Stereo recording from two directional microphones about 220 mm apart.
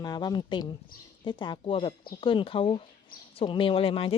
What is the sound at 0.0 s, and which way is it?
Speech, 20° left (ahead or behind).